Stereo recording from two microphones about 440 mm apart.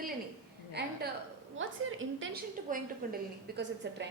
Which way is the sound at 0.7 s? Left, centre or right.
Right.